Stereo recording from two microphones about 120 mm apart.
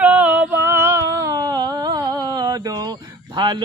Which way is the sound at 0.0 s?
10° right (ahead or behind).